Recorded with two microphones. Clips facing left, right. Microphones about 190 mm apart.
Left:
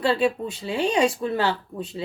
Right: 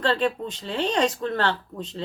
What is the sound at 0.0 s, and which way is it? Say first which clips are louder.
Speech: left 2 dB; 10° left (ahead or behind).